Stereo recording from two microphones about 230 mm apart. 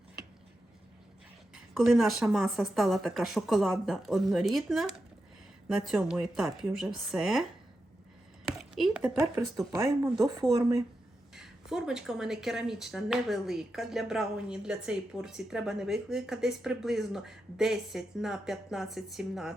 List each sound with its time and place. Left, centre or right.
1.7 s speech: centre
8.5 s speech: centre